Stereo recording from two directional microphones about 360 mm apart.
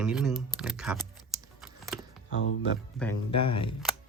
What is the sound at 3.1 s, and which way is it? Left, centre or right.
Speech, left.